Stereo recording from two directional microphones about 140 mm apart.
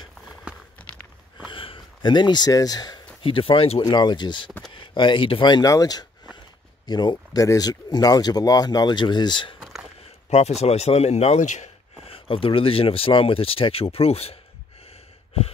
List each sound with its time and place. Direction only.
0.5 s walk: 10° right (ahead or behind)
1.5 s a sound: 40° left (ahead or behind)
3.2 s speech: 40° left (ahead or behind)
3.8 s speech: 30° left (ahead or behind)
9.6 s a sound: centre (ahead or behind)
10.3 s speech: 50° left (ahead or behind)